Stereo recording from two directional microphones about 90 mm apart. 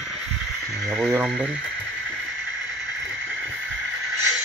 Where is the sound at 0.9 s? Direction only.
25° right (ahead or behind).